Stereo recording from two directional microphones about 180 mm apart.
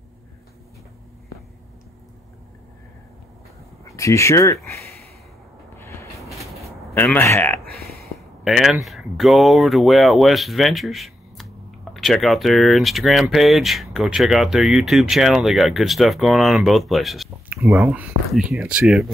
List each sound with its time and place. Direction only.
3.9 s speech: 15° left (ahead or behind)
4.6 s a sound: 10° left (ahead or behind)
6.9 s speech: 10° left (ahead or behind)
8.5 s speech: centre (ahead or behind)